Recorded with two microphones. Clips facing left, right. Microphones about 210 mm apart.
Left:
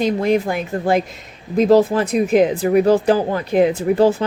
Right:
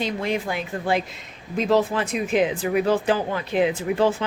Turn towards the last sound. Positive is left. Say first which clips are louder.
# left 6 dB
turn(degrees=40)  # may be behind; listen again after turning